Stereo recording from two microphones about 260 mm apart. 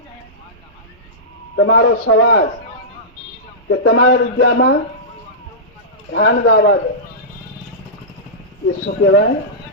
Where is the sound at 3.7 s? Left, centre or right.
Left.